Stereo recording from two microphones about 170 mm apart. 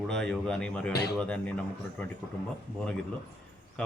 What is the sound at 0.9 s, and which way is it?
Speech, 75° left (ahead or behind).